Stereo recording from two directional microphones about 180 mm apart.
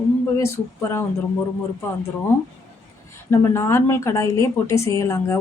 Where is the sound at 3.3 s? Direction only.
15° left (ahead or behind).